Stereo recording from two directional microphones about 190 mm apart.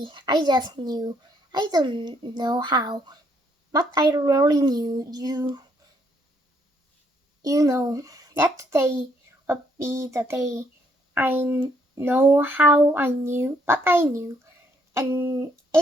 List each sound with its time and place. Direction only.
0.0 s a child's voice: 25° right (ahead or behind)
7.4 s a child's voice: 20° right (ahead or behind)